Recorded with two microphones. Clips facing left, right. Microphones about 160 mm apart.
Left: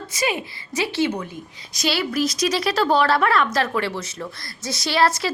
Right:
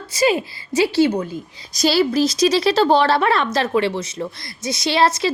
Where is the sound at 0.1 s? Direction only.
30° right (ahead or behind).